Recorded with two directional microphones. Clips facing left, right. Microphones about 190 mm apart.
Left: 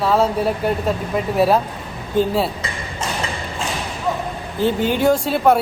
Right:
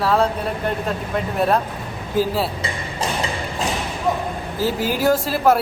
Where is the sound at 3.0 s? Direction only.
35° right (ahead or behind).